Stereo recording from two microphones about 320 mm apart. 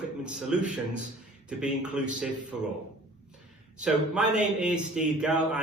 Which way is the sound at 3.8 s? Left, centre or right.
Centre.